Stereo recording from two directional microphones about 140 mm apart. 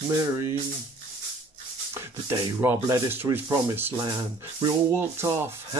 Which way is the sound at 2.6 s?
15° right (ahead or behind).